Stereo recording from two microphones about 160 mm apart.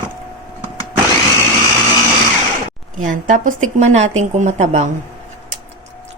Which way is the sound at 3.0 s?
55° right (ahead or behind).